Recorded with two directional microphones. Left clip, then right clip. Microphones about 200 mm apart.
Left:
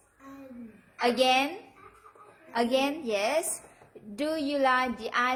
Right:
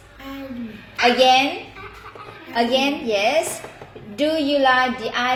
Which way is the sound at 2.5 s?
45° left (ahead or behind).